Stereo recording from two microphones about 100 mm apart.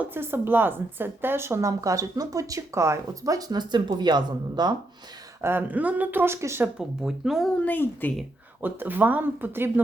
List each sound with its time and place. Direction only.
0.0 s a woman's voice: 20° right (ahead or behind); by 4.7 s 45° right (ahead or behind)
5.4 s speech: 20° right (ahead or behind)
6.7 s speech: 5° right (ahead or behind)
7.5 s a woman's voice: 15° left (ahead or behind)
8.6 s speech: 20° right (ahead or behind)